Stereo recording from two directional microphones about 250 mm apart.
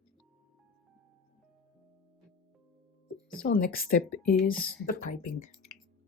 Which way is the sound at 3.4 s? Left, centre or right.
Left.